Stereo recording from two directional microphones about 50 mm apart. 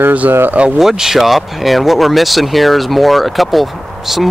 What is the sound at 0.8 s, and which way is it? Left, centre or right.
Speech, centre.